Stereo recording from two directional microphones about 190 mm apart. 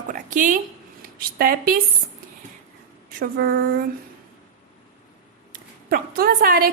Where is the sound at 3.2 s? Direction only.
50° right (ahead or behind).